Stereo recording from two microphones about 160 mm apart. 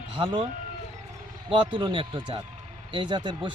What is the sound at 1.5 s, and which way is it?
Speech, 30° right (ahead or behind).